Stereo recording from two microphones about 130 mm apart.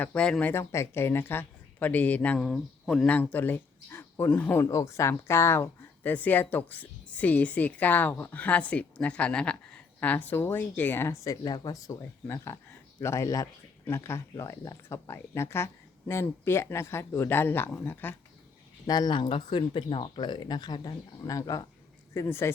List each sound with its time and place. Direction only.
0.0 s speech: 10° left (ahead or behind)
3.3 s speech: 15° left (ahead or behind)
18.9 s speech: 30° left (ahead or behind)